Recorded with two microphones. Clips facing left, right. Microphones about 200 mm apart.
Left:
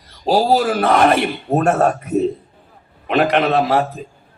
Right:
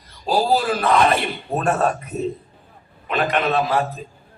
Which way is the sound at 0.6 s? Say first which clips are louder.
Left 3 dB; 50° left (ahead or behind).